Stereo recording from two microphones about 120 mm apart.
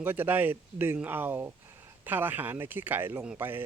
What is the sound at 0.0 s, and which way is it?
Speech, 15° right (ahead or behind).